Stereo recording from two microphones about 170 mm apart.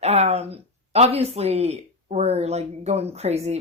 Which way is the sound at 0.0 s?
40° right (ahead or behind).